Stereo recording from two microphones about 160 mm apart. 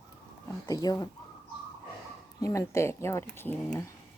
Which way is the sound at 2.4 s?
20° left (ahead or behind).